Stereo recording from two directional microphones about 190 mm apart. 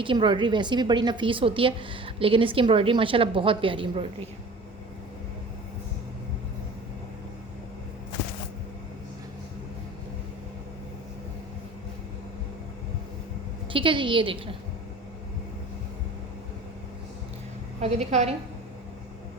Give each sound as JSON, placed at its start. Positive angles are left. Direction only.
{"t": 0.0, "sound": "a woman's voice", "side_deg": -25}
{"t": 13.7, "sound": "a woman's voice", "side_deg": -25}
{"t": 17.7, "sound": "a woman's voice", "side_deg": -35}